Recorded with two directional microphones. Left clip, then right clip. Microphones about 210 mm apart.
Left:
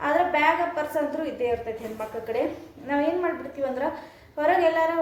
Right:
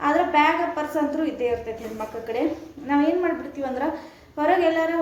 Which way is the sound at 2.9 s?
Centre (ahead or behind).